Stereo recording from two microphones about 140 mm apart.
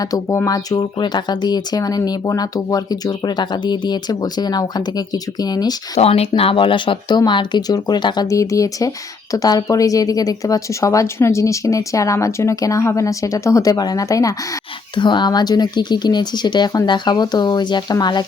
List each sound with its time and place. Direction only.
0.0 s speech: 25° left (ahead or behind)
6.0 s speech: 45° left (ahead or behind); by 18.3 s 30° left (ahead or behind)